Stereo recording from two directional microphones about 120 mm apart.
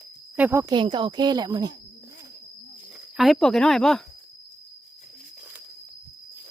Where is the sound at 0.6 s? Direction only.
40° right (ahead or behind).